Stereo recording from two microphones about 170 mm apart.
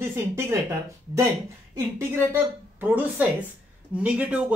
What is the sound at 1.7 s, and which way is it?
Speech, 15° right (ahead or behind).